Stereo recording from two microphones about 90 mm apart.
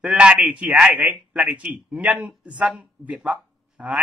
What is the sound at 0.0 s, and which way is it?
Speech, 10° right (ahead or behind).